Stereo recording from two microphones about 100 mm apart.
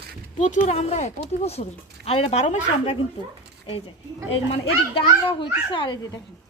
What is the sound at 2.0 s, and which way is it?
Speech, 75° left (ahead or behind).